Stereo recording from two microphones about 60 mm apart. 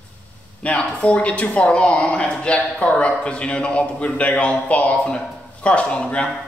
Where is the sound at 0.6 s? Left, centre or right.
Centre.